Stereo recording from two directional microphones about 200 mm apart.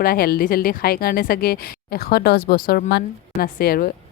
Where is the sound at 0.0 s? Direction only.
50° left (ahead or behind).